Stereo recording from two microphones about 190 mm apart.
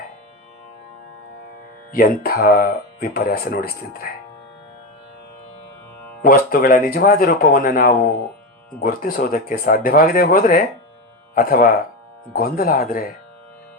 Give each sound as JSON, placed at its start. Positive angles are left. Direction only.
{"t": 1.9, "sound": "speech", "side_deg": 50}
{"t": 6.2, "sound": "speech", "side_deg": 50}